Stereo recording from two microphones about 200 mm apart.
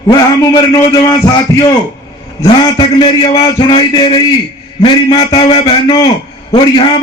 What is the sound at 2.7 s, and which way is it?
A man's voice, 20° left (ahead or behind).